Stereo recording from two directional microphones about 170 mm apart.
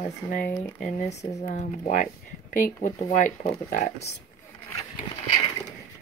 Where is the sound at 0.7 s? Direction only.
50° left (ahead or behind).